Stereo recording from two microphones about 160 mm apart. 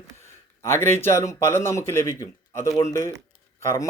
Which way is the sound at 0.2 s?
15° left (ahead or behind).